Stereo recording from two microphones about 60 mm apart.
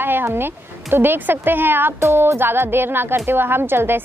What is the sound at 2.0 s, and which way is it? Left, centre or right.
A woman's voice, right.